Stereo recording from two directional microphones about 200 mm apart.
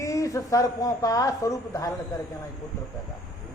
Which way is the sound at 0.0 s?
15° left (ahead or behind).